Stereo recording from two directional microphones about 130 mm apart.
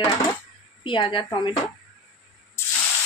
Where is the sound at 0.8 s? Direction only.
40° left (ahead or behind).